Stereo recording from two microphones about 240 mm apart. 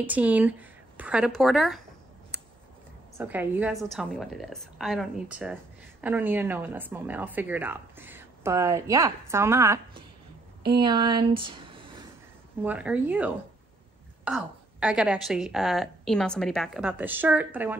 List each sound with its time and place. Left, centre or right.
0.0 s a woman's voice: centre
3.2 s a woman's voice: centre
12.6 s a woman's voice: centre